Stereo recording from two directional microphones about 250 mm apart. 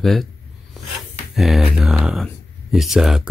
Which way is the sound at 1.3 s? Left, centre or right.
Centre.